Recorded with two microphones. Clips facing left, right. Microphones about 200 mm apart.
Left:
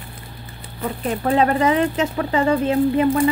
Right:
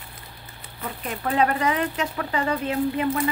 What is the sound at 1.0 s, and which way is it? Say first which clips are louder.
Speech: left 5 dB; 35° left (ahead or behind).